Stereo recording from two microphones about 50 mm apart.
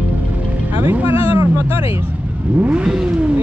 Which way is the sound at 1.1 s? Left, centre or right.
Right.